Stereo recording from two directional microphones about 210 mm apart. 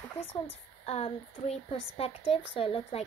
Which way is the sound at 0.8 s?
30° left (ahead or behind).